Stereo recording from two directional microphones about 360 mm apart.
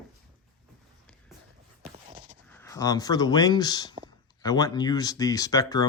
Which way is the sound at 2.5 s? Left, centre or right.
Centre.